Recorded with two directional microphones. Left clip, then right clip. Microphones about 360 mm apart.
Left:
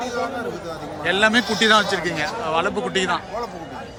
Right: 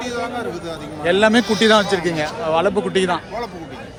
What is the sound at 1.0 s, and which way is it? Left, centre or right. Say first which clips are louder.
A man's voice: right 3 dB; centre.